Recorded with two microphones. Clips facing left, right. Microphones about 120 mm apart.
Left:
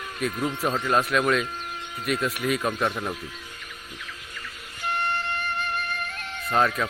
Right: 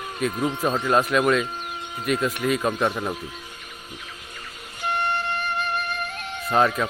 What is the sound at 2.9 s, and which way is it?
Speech, 10° right (ahead or behind).